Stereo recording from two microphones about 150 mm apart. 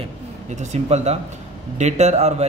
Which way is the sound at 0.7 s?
45° right (ahead or behind).